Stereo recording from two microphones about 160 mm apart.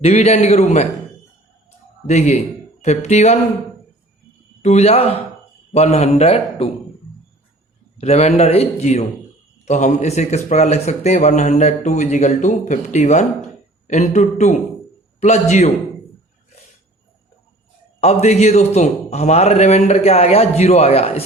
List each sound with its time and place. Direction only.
0.0 s a man's voice: 40° left (ahead or behind)
2.0 s a man's voice: 45° left (ahead or behind)
4.6 s a man's voice: 40° left (ahead or behind)
7.9 s a man's voice: 40° left (ahead or behind)
18.0 s a man's voice: 40° left (ahead or behind)